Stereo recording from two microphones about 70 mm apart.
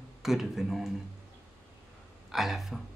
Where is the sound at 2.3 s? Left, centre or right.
Centre.